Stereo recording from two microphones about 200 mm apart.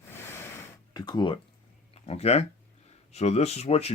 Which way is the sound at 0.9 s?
20° left (ahead or behind).